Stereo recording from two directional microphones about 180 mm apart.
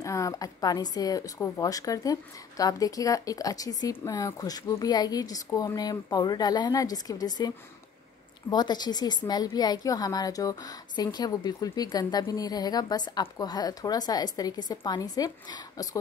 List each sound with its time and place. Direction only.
0.0 s a woman's voice: 15° left (ahead or behind)